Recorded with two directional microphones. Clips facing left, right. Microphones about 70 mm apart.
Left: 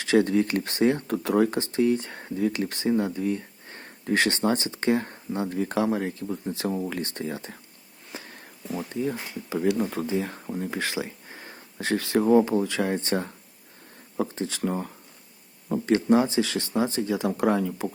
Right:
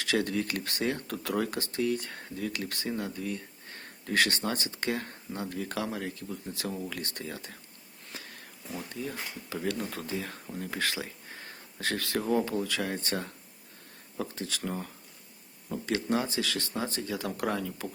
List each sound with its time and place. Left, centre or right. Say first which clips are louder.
0.0 s speech: left 8 dB; left
8.1 s sniff: left 5 dB; left
8.9 s speech: left 9 dB; left
15.9 s speech: left 9 dB; left